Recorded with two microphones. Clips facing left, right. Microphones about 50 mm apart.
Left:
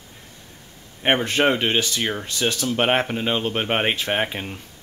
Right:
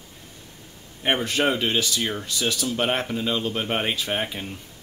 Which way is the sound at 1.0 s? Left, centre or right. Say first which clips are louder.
Left 3 dB; left.